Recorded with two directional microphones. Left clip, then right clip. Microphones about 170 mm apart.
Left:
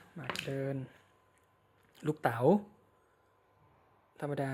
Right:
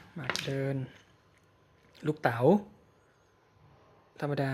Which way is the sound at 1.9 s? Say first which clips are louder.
Right 3 dB; 10° left (ahead or behind).